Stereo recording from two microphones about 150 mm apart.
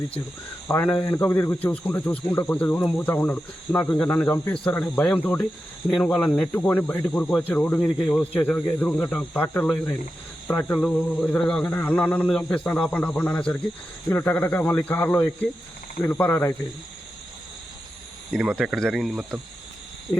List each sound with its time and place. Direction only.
0.7 s speech: 15° left (ahead or behind)
18.3 s speech: 5° right (ahead or behind)